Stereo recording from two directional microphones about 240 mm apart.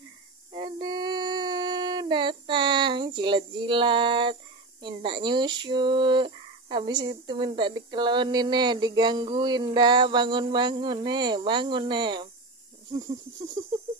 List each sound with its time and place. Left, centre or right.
0.6 s dog: centre
4.8 s speech: centre
13.6 s a sound: centre